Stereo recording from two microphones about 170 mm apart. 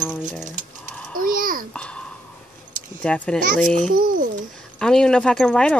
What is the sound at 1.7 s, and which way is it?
Babbling, 5° left (ahead or behind).